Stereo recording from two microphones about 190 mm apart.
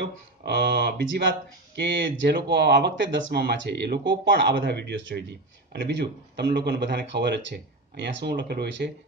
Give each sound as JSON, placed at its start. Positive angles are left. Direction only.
{"t": 0.0, "sound": "speech", "side_deg": -60}